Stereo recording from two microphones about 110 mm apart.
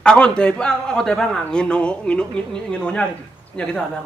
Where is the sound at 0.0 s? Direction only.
10° left (ahead or behind).